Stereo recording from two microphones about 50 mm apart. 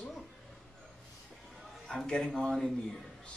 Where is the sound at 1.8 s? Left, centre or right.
Centre.